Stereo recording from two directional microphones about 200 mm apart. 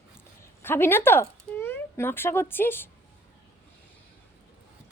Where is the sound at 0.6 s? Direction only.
10° left (ahead or behind).